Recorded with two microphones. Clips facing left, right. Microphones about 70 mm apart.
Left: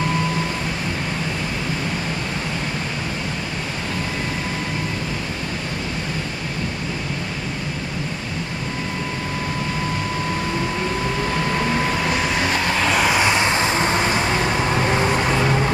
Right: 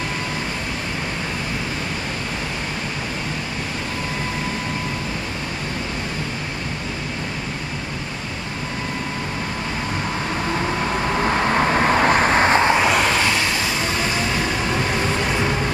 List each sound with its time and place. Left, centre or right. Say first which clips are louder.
11.2 s vehicle: right 5 dB; right
12.9 s vehicle: even; centre
13.2 s vehicle: left 2 dB; left